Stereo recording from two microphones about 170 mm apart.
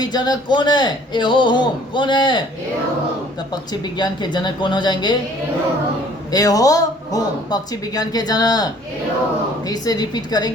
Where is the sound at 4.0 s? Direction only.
25° left (ahead or behind).